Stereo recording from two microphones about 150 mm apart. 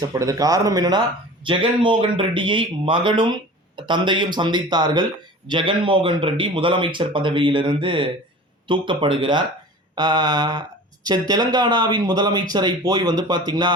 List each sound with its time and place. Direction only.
0.0 s a man's voice: 25° right (ahead or behind)